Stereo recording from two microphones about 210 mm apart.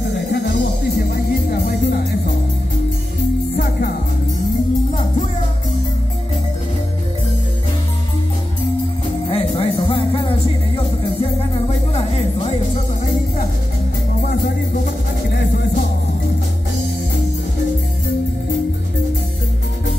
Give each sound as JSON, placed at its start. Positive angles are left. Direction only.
{"t": 0.1, "sound": "music", "side_deg": 55}
{"t": 9.3, "sound": "music", "side_deg": 25}
{"t": 11.5, "sound": "music", "side_deg": 30}